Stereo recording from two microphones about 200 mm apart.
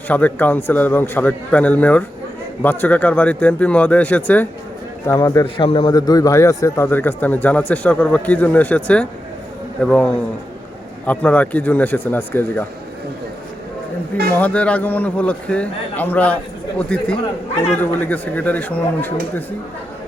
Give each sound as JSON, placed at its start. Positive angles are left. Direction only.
{"t": 0.1, "sound": "a man's voice", "side_deg": 5}
{"t": 14.3, "sound": "a man's voice", "side_deg": 5}